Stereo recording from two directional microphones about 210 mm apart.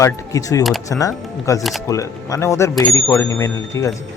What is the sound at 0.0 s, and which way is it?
Speech, 15° left (ahead or behind).